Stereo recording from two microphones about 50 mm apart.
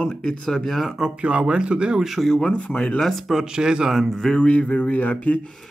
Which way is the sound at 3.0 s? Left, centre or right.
Centre.